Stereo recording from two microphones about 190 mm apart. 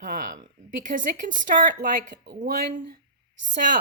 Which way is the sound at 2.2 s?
55° right (ahead or behind).